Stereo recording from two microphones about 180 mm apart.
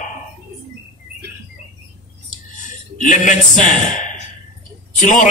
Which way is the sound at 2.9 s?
45° left (ahead or behind).